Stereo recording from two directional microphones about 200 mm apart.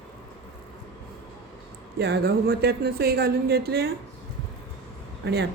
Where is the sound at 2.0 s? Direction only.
55° right (ahead or behind).